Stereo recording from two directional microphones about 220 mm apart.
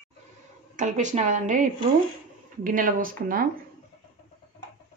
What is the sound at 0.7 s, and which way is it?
Speech, 35° right (ahead or behind).